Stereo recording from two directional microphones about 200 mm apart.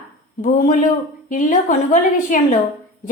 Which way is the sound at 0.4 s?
40° left (ahead or behind).